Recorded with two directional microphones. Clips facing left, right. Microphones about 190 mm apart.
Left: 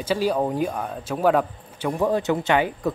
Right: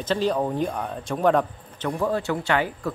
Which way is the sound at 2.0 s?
20° left (ahead or behind).